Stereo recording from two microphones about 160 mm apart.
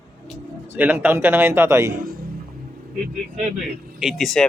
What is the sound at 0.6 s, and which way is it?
Speech, 10° right (ahead or behind).